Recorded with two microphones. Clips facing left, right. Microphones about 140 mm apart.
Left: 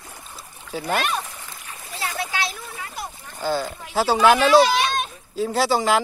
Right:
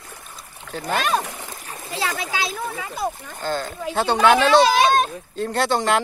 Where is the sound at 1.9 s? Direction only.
90° right.